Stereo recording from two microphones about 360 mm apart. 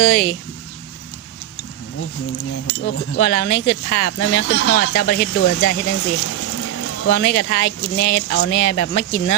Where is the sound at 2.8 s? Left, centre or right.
Left.